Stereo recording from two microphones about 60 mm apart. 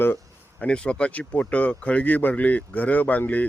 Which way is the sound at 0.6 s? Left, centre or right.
Centre.